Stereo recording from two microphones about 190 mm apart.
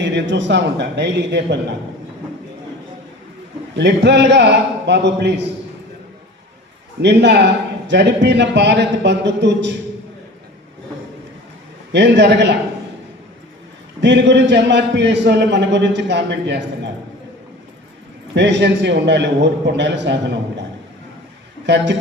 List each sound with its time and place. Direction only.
0.0 s a man's voice: 65° right (ahead or behind)
3.8 s a man's voice: 65° right (ahead or behind)
7.0 s a man's voice: 65° right (ahead or behind)
11.9 s a man's voice: 65° right (ahead or behind)
14.0 s a man's voice: 65° right (ahead or behind)
18.3 s a man's voice: 65° right (ahead or behind)
21.7 s a man's voice: 65° right (ahead or behind)